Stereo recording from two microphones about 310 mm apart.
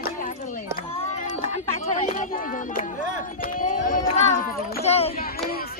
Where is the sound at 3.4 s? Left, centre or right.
Left.